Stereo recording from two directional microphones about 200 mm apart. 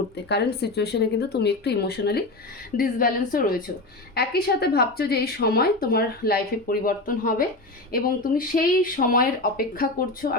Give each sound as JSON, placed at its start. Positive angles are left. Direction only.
{"t": 0.3, "sound": "speech", "side_deg": 55}